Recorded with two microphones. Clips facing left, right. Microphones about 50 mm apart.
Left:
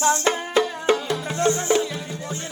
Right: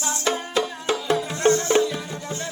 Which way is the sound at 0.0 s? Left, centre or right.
Left.